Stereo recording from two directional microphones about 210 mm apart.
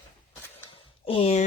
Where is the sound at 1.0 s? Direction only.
25° left (ahead or behind).